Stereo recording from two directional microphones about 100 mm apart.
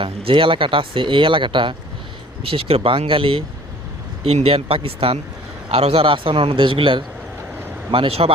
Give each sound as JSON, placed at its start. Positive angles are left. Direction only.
{"t": 0.0, "sound": "speech", "side_deg": -60}
{"t": 2.4, "sound": "speech", "side_deg": -70}
{"t": 4.2, "sound": "speech", "side_deg": -80}